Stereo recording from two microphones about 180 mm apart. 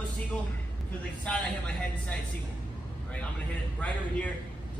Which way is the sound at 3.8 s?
5° left (ahead or behind).